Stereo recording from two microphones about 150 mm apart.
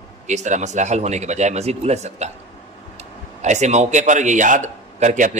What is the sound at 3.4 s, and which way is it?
A man's voice, 50° right (ahead or behind).